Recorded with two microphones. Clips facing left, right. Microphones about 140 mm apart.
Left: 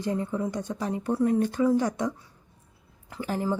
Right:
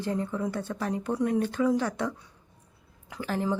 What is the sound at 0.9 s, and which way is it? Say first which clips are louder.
Speech: left 3 dB; 5° left (ahead or behind).